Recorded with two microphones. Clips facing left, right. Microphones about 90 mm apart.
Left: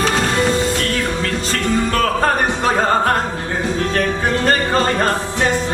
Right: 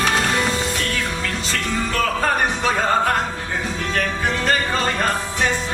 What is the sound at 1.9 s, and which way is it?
Music, 45° left (ahead or behind).